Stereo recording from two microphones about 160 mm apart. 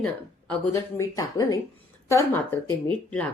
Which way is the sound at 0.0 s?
5° left (ahead or behind).